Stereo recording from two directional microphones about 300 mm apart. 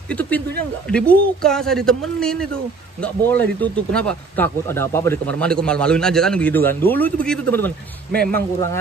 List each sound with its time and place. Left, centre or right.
0.1 s a man's voice: centre
8.1 s a man's voice: right